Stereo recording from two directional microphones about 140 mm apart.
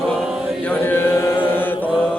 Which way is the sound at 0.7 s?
15° left (ahead or behind).